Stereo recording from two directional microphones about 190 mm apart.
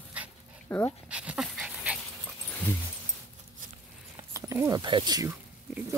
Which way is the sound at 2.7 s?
10° left (ahead or behind).